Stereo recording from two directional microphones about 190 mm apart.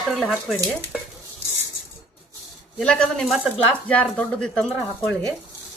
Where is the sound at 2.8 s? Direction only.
5° left (ahead or behind).